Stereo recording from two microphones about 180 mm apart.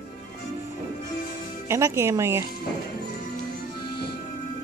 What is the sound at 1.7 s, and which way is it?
Speech, 15° right (ahead or behind).